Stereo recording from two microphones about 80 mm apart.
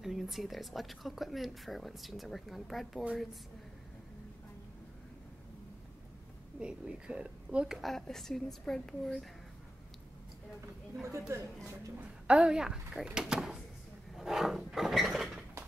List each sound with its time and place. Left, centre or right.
0.0 s speech: centre
6.6 s a woman's voice: centre
7.9 s speech: centre
11.1 s a woman's voice: right
12.3 s a woman's voice: centre
14.1 s a sound: centre